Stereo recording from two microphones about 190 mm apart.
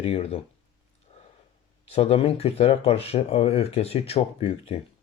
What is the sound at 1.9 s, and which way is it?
Speech, 30° left (ahead or behind).